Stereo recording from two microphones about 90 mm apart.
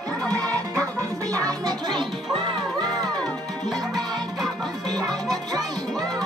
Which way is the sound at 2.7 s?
50° right (ahead or behind).